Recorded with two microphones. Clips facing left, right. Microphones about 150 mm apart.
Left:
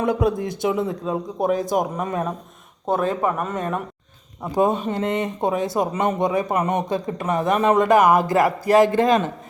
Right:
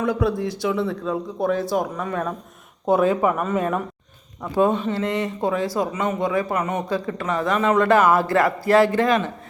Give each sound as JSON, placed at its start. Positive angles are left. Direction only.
{"t": 0.0, "sound": "speech", "side_deg": 20}
{"t": 2.8, "sound": "speech", "side_deg": -5}
{"t": 4.5, "sound": "speech", "side_deg": 15}
{"t": 5.9, "sound": "speech", "side_deg": 35}
{"t": 6.1, "sound": "a man's voice", "side_deg": 20}